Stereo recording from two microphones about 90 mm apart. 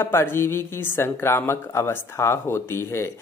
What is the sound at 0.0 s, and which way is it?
Speech, 25° left (ahead or behind).